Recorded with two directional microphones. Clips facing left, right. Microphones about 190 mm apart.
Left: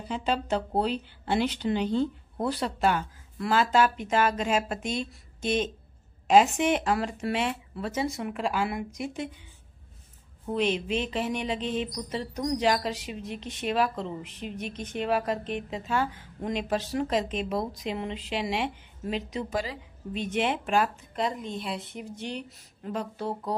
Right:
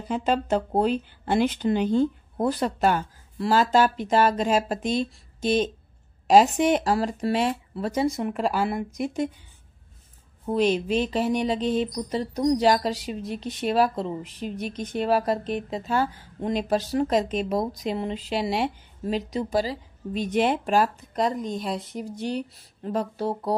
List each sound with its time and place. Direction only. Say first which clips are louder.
0.1 s speech: right 4 dB; 45° right (ahead or behind)
10.4 s speech: right 5 dB; 40° right (ahead or behind)